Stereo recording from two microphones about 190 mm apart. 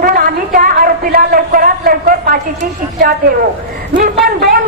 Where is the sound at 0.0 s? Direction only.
50° right (ahead or behind).